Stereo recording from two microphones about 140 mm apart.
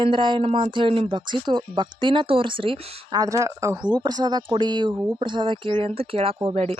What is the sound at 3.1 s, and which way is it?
Speech, 25° right (ahead or behind).